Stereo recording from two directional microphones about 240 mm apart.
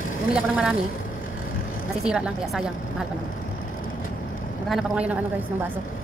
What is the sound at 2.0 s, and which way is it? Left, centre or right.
A woman's voice, centre.